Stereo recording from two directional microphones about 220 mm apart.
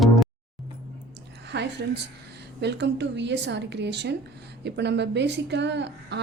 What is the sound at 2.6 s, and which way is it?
A woman's voice, 50° right (ahead or behind).